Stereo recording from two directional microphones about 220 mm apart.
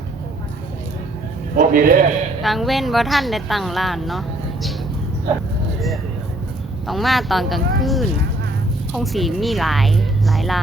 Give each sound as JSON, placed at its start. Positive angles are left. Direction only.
{"t": 1.5, "sound": "a man's voice", "side_deg": -40}
{"t": 2.4, "sound": "a woman's voice", "side_deg": 0}
{"t": 6.8, "sound": "a woman's voice", "side_deg": 0}